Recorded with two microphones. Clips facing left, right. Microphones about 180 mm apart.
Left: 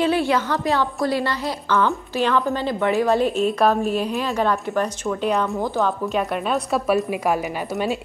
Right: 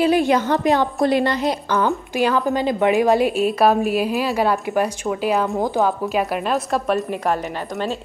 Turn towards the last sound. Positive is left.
turn(degrees=10)  # may be behind; listen again after turning